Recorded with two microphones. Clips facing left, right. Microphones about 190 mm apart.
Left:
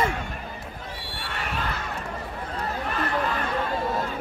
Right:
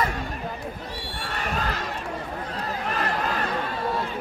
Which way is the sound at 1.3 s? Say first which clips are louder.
Right 2 dB; 40° right (ahead or behind).